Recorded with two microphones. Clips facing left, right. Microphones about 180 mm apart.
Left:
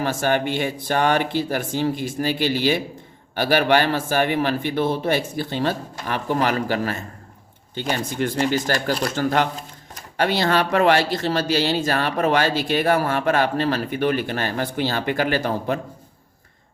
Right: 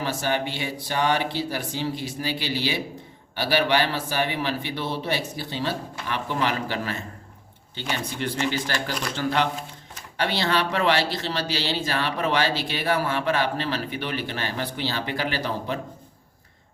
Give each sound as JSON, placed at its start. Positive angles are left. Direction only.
{"t": 0.0, "sound": "speech", "side_deg": 50}